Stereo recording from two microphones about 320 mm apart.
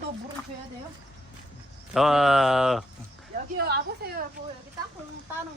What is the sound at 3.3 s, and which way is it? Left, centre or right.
Speech, right.